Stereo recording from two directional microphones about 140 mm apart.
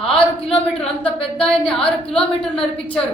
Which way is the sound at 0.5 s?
45° left (ahead or behind).